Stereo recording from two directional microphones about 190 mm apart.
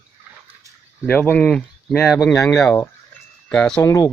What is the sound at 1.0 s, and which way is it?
Speech, 10° left (ahead or behind).